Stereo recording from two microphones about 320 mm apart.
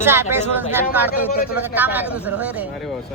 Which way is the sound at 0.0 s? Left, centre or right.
Centre.